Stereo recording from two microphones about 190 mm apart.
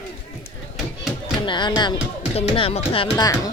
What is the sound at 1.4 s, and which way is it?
Speech, 25° left (ahead or behind).